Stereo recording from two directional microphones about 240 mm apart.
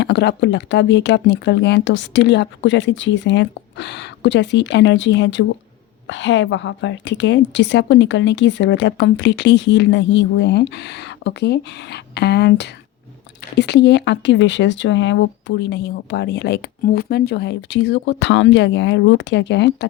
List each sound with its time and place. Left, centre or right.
0.0 s a woman's voice: left